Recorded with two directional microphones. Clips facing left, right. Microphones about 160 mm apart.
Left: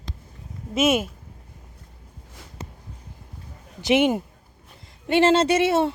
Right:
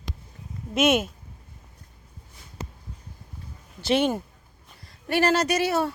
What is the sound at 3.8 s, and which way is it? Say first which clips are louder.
A woman's voice: left 3 dB; 15° left (ahead or behind).